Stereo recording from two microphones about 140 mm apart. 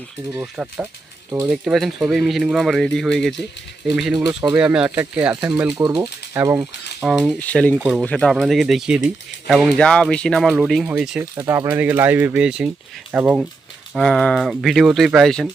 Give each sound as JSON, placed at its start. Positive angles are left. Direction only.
{"t": 0.3, "sound": "speech", "side_deg": -10}
{"t": 7.0, "sound": "speech", "side_deg": -5}
{"t": 7.3, "sound": "speech", "side_deg": 10}
{"t": 7.8, "sound": "speech", "side_deg": -10}
{"t": 8.0, "sound": "speech", "side_deg": 5}
{"t": 11.2, "sound": "speech", "side_deg": -20}
{"t": 13.9, "sound": "speech", "side_deg": 5}